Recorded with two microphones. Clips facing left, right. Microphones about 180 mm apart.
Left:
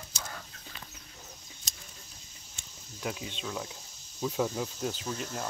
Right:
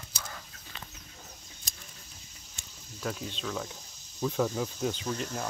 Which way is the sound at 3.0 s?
10° left (ahead or behind).